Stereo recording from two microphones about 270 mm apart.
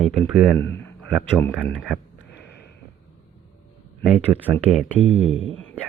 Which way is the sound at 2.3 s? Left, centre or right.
Left.